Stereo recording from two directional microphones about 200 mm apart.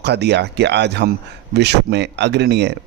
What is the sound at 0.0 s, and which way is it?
Speech, 55° right (ahead or behind).